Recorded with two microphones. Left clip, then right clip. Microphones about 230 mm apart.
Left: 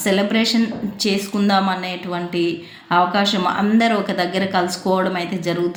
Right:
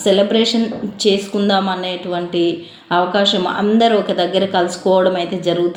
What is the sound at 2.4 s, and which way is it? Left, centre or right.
Speech, left.